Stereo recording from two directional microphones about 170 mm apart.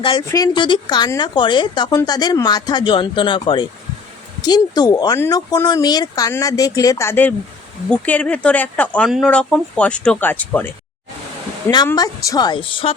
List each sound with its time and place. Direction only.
0.0 s speech: 30° left (ahead or behind); by 10.7 s 10° left (ahead or behind)
11.9 s speech: 20° left (ahead or behind)